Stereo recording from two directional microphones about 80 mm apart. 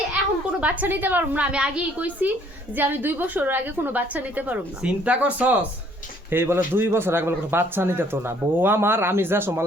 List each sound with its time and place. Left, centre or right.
0.6 s speech: centre
6.3 s speech: right